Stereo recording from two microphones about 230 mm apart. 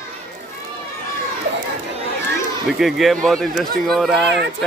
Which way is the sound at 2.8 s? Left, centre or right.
Centre.